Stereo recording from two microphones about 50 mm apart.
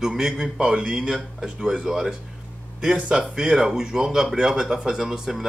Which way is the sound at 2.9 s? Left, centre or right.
Right.